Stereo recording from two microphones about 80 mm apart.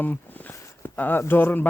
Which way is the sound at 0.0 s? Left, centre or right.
Left.